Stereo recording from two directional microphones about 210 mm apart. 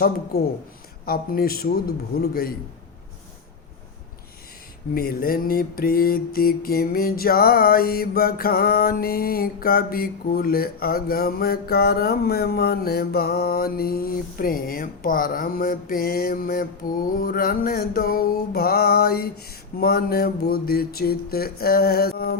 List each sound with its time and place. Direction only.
1.0 s mantra: 45° left (ahead or behind)
4.9 s mantra: 45° left (ahead or behind)